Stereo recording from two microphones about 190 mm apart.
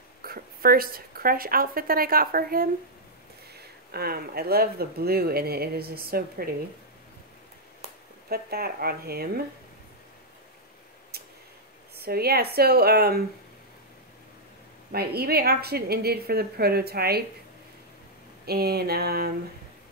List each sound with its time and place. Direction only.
0.2 s a woman's voice: 50° right (ahead or behind)
3.9 s speech: 55° right (ahead or behind)
8.3 s speech: 55° right (ahead or behind)
11.9 s a woman's voice: 55° right (ahead or behind)
14.9 s a woman's voice: 55° right (ahead or behind)
18.4 s a woman's voice: 55° right (ahead or behind)